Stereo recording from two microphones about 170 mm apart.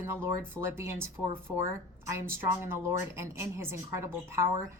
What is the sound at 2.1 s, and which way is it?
Speech, 15° right (ahead or behind).